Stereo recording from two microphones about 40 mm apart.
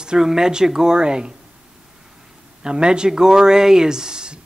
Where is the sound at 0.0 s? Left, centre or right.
Centre.